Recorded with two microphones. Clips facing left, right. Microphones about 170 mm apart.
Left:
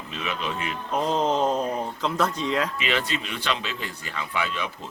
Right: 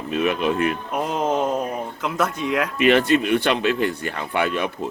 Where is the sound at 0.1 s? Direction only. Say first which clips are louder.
Right 10 dB; 55° right (ahead or behind).